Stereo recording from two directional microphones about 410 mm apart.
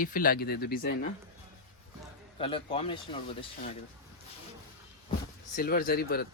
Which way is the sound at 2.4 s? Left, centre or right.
Centre.